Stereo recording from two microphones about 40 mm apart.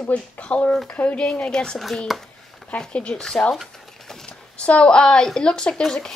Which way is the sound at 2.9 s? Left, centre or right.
Left.